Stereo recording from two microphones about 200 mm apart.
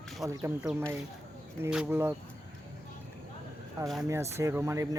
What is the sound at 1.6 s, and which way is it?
Speech, 10° right (ahead or behind).